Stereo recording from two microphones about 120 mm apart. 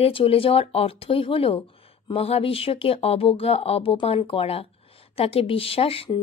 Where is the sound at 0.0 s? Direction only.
50° left (ahead or behind).